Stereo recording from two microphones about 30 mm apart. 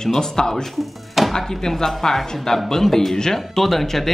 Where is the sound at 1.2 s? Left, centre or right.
Centre.